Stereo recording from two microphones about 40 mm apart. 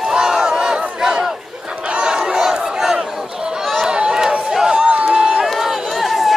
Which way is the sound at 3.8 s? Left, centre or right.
Right.